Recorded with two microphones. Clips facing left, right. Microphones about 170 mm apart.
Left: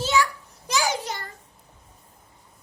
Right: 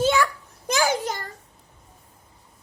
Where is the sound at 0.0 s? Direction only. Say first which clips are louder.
Right 3 dB; 55° right (ahead or behind).